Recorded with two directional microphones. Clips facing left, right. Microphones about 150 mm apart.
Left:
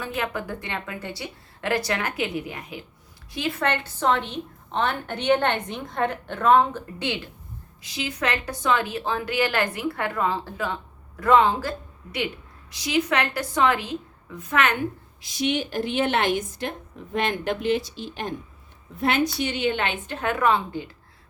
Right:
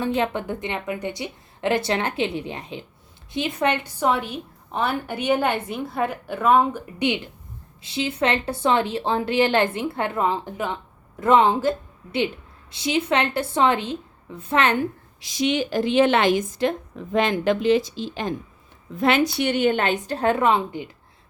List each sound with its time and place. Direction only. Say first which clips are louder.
0.0 s a woman's voice: right 6 dB; 30° right (ahead or behind)
7.8 s a woman's voice: right 5 dB; 30° right (ahead or behind)
12.7 s a woman's voice: right 2 dB; 25° right (ahead or behind)
15.2 s a woman's voice: right 3 dB; 90° right; by 20.9 s 20° right (ahead or behind)